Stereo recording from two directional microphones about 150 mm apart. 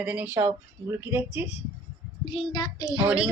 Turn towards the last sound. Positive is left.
turn(degrees=-10)  # may be behind; listen again after turning